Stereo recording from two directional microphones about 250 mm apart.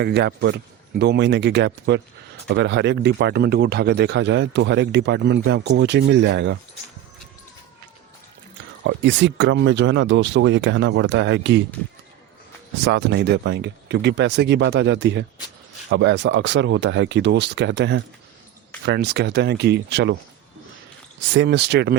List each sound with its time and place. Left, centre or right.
0.0 s speech: right
8.8 s speech: right
12.8 s speech: right
21.3 s speech: right